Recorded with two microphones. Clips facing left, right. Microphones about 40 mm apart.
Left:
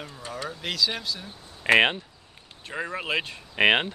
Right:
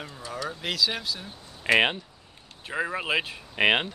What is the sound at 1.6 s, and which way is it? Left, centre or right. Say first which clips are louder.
Speech: left 2 dB; centre.